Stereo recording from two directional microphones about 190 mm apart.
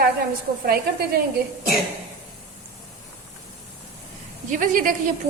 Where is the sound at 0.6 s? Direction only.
55° right (ahead or behind).